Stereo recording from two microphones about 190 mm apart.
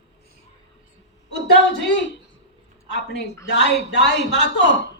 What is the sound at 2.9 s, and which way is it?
A man's voice, 65° left (ahead or behind).